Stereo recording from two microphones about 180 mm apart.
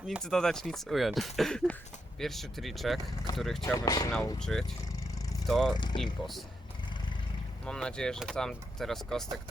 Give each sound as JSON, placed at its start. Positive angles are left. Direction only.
{"t": 0.1, "sound": "speech", "side_deg": 0}
{"t": 3.6, "sound": "speech", "side_deg": 20}
{"t": 4.4, "sound": "speech", "side_deg": 5}
{"t": 5.7, "sound": "speech", "side_deg": 25}
{"t": 7.6, "sound": "speech", "side_deg": 5}